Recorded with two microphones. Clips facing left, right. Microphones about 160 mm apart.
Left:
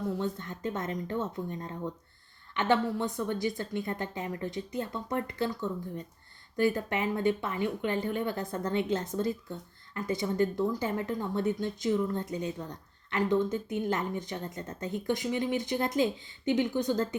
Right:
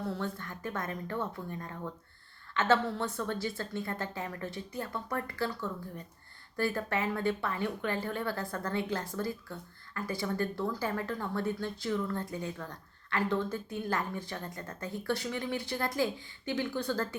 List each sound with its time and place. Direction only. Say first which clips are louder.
0.1 s a woman's voice: left 4 dB; 20° left (ahead or behind)